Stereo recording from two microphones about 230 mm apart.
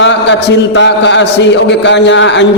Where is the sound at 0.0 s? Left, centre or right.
Left.